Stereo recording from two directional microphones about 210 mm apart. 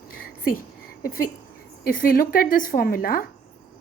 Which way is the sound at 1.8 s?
40° left (ahead or behind).